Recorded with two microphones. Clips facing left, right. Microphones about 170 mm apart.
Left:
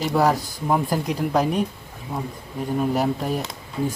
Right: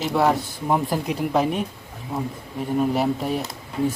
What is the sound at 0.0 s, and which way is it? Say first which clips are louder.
Speech: even; centre (ahead or behind).